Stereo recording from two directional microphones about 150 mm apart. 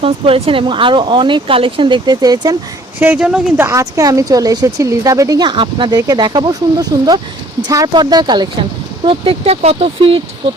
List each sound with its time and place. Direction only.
0.0 s speech: 40° right (ahead or behind)
3.0 s speech: 10° right (ahead or behind)
3.7 s speech: 20° right (ahead or behind)
9.0 s speech: 40° right (ahead or behind)